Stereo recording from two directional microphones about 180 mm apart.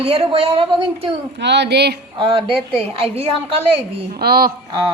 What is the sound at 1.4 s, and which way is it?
Speech, 70° right (ahead or behind).